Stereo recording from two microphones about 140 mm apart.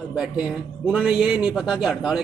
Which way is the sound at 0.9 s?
5° right (ahead or behind).